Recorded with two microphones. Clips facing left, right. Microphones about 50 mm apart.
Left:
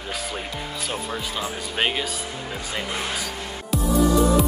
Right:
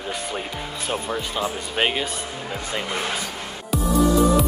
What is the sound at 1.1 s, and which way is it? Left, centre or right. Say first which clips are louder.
Speech: right 3 dB; centre.